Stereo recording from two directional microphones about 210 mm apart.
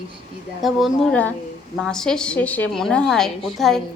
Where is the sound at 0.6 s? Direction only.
Centre (ahead or behind).